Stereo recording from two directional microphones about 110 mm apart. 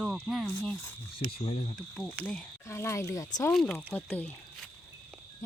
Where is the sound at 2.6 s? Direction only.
25° left (ahead or behind).